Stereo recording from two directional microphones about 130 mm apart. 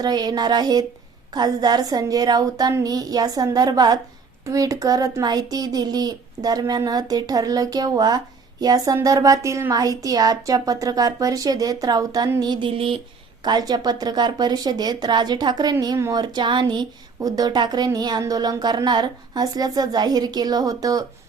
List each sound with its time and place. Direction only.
0.0 s speech: 30° right (ahead or behind)
12.4 s a sound: 35° right (ahead or behind)
13.4 s speech: 30° right (ahead or behind)